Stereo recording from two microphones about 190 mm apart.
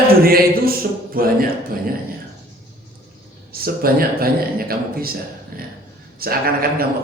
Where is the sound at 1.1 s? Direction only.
50° right (ahead or behind).